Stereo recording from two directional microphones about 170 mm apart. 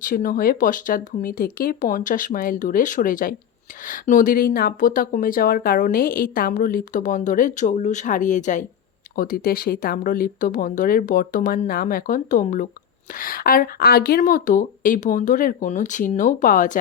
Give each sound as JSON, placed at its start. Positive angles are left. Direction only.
{"t": 0.0, "sound": "speech", "side_deg": 55}
{"t": 9.1, "sound": "speech", "side_deg": 60}